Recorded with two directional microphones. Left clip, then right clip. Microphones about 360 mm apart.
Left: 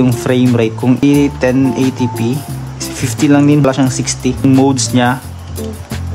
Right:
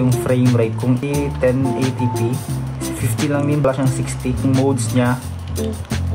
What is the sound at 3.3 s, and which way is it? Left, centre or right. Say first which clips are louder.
Speech: left 7 dB; left.